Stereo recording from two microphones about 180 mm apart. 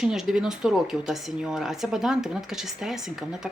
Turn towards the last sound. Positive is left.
turn(degrees=0)  # may be behind; listen again after turning